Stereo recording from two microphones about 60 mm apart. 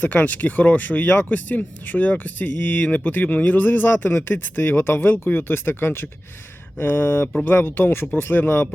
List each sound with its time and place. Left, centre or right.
0.0 s speech: left
6.7 s a sound: left
7.4 s speech: left